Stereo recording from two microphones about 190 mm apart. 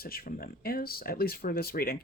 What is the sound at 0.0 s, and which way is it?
Speech, 50° left (ahead or behind).